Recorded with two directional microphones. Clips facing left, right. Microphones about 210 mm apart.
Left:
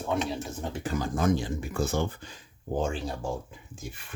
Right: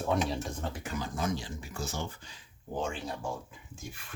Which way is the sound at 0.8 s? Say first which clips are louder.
Left 9 dB; 50° left (ahead or behind).